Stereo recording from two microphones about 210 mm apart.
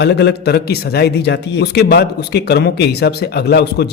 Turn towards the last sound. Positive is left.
turn(degrees=50)  # may be behind; listen again after turning